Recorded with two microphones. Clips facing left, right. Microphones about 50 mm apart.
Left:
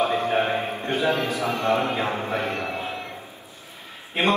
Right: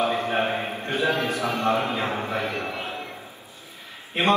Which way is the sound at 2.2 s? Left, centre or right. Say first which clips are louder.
Left 1 dB; left.